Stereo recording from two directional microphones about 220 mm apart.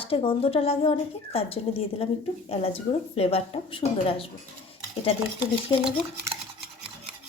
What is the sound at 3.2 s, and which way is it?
A woman's voice, 25° left (ahead or behind).